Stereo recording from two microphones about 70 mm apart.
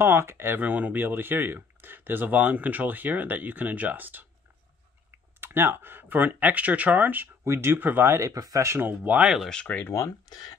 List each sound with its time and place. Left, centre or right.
0.0 s speech: right
0.7 s speech: right
5.4 s speech: right
7.4 s speech: right
8.2 s speech: right
8.6 s speech: right
9.0 s speech: right
9.5 s speech: centre
9.9 s speech: left